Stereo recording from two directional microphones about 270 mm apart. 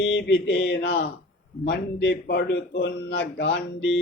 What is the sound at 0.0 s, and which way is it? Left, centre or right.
Speech, left.